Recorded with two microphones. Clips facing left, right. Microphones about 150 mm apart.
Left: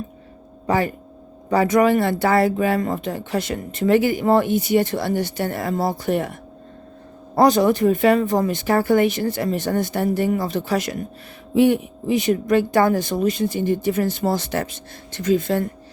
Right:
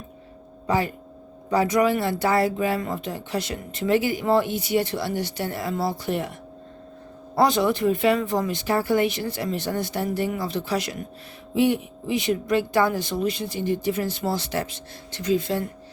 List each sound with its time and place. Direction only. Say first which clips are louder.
1.5 s speech: left 4 dB; 55° left (ahead or behind)
7.3 s speech: left 5 dB; 45° left (ahead or behind)